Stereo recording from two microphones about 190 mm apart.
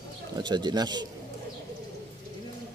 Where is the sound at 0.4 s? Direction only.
25° right (ahead or behind).